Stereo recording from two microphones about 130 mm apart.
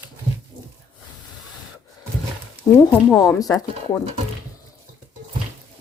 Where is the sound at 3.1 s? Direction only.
30° left (ahead or behind).